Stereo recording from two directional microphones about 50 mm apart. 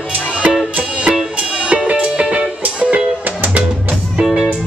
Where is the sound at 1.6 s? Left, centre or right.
Right.